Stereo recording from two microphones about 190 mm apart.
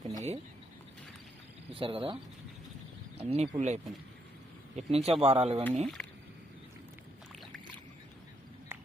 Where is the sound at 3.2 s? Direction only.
30° right (ahead or behind).